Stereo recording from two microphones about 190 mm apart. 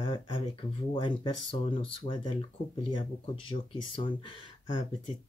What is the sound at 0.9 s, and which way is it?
Speech, 25° left (ahead or behind).